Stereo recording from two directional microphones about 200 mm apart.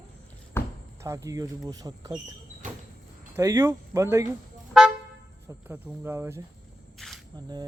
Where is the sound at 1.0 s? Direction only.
15° right (ahead or behind).